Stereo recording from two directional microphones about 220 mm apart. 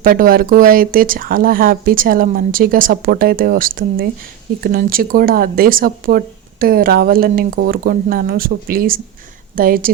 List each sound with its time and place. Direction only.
0.0 s speech: 40° right (ahead or behind)